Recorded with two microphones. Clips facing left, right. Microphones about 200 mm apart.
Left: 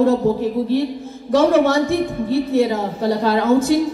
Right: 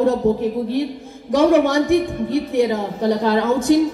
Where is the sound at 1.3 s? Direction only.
15° right (ahead or behind).